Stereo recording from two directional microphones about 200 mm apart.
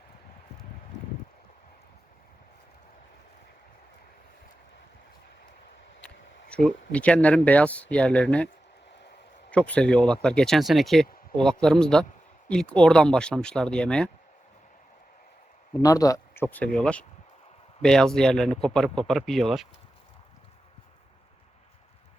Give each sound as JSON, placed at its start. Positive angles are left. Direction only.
{"t": 6.5, "sound": "speech", "side_deg": 5}
{"t": 9.5, "sound": "speech", "side_deg": 5}
{"t": 15.8, "sound": "speech", "side_deg": 15}